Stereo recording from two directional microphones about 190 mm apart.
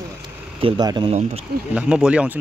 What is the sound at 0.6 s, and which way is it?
Speech, 25° right (ahead or behind).